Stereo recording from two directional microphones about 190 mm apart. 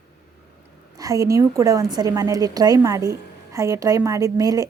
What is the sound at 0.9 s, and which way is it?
Speech, 20° right (ahead or behind).